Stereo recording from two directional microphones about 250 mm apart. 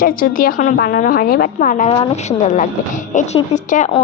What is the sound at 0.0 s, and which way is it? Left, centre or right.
A woman's voice, left.